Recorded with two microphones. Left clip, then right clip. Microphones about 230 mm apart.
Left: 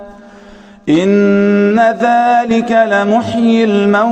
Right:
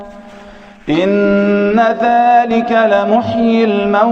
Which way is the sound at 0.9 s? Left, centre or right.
Left.